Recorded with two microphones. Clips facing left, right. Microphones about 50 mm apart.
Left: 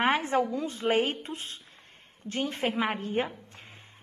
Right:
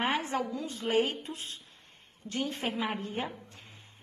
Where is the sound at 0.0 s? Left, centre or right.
Left.